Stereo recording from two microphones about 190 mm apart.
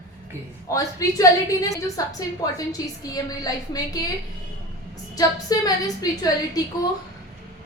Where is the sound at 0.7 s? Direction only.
15° left (ahead or behind).